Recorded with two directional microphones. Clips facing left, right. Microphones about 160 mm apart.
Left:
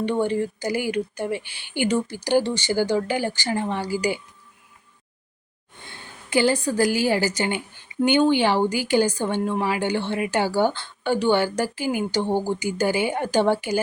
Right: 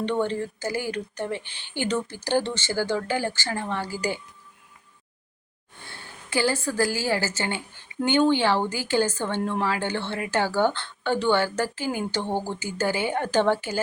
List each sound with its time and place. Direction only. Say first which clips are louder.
0.0 s a woman's voice: left 3 dB; 10° left (ahead or behind)
5.8 s a woman's voice: left 1 dB; 20° left (ahead or behind)